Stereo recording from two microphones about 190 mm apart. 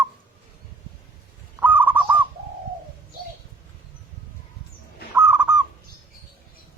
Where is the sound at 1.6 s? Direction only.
10° right (ahead or behind).